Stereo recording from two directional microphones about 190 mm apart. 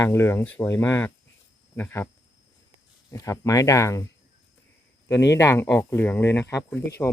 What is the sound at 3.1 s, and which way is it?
Speech, 15° left (ahead or behind).